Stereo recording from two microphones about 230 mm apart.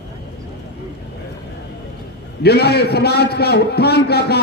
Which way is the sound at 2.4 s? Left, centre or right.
Left.